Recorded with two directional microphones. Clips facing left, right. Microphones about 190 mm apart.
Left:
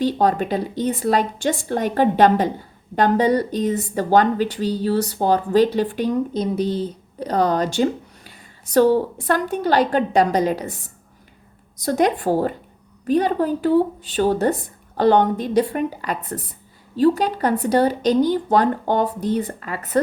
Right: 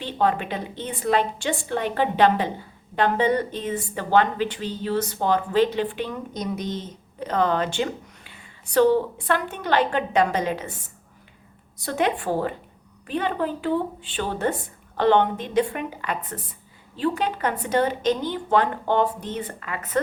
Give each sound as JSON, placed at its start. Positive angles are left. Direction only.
{"t": 0.0, "sound": "a woman's voice", "side_deg": 40}
{"t": 11.9, "sound": "a woman's voice", "side_deg": 40}